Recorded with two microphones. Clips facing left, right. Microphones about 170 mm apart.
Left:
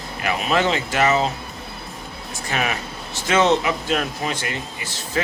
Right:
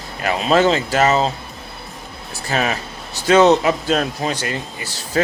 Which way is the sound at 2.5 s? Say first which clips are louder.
Right 4 dB; 35° right (ahead or behind).